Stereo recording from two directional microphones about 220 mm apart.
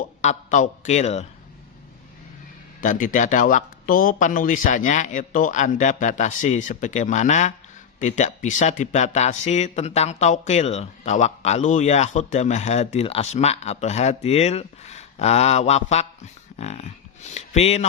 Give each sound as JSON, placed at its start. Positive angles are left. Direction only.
{"t": 0.2, "sound": "speech", "side_deg": 35}
{"t": 2.8, "sound": "speech", "side_deg": 35}